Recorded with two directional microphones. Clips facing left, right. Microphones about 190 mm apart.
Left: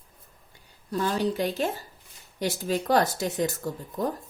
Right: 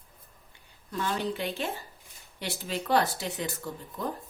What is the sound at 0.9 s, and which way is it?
A woman's voice, 35° left (ahead or behind).